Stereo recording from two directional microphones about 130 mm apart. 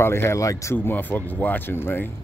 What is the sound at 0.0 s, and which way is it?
Speech, 20° left (ahead or behind).